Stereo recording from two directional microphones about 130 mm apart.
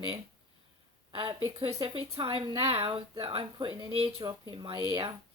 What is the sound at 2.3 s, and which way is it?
Speech, 40° right (ahead or behind).